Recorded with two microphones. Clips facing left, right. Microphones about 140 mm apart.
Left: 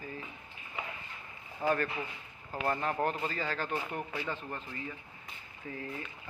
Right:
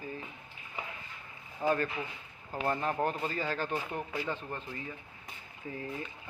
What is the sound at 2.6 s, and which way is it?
A man's voice, 20° right (ahead or behind).